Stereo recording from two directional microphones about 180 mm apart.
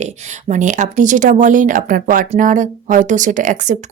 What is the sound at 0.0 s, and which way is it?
Speech, 40° right (ahead or behind).